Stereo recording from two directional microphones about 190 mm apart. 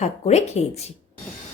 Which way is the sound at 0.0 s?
35° left (ahead or behind).